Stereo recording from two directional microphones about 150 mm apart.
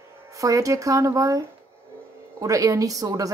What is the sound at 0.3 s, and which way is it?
Speech, 20° right (ahead or behind).